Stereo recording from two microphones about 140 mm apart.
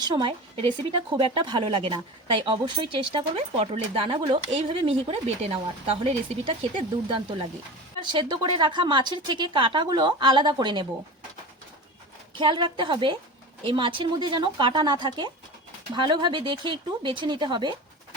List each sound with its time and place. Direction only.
0.1 s a woman's voice: 35° right (ahead or behind)
12.3 s a woman's voice: 35° right (ahead or behind)